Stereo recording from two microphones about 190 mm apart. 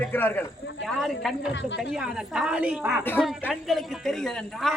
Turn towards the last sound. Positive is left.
turn(degrees=0)  # may be behind; listen again after turning